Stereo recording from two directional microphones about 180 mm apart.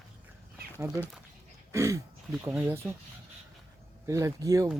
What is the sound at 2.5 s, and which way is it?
Speech, 10° right (ahead or behind).